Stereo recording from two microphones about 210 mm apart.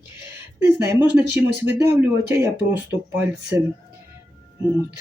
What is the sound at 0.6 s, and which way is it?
Speech, 15° right (ahead or behind).